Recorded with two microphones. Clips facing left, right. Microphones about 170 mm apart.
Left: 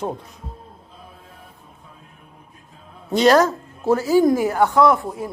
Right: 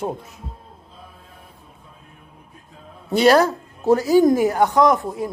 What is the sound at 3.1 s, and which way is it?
Speech, 10° right (ahead or behind).